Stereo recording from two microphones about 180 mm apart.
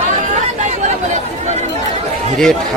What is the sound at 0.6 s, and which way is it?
Chatter, 40° right (ahead or behind).